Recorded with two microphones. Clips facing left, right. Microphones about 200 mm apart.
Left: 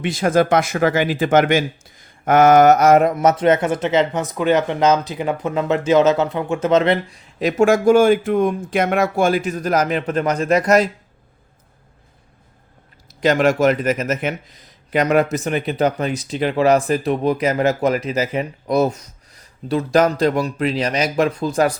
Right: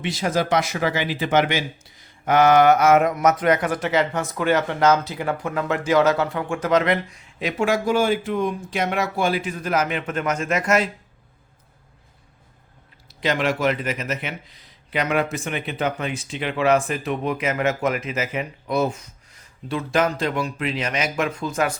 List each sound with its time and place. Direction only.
0.0 s speech: 50° left (ahead or behind)
13.2 s speech: 45° left (ahead or behind)